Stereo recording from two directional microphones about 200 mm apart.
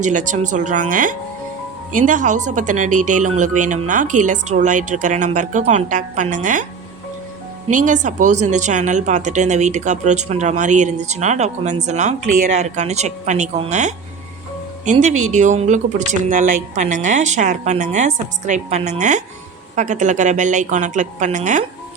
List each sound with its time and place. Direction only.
0.0 s speech: 40° right (ahead or behind)
7.7 s speech: 40° right (ahead or behind)
15.3 s speech: 35° right (ahead or behind)